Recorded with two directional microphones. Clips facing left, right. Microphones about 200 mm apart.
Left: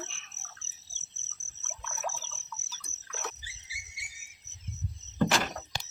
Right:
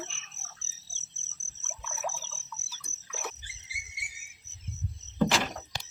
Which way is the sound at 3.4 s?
55° right (ahead or behind).